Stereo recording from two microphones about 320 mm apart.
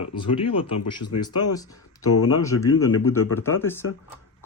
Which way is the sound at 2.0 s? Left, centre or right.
Left.